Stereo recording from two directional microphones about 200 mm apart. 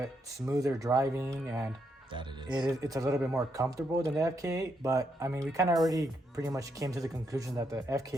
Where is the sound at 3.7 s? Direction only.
15° right (ahead or behind).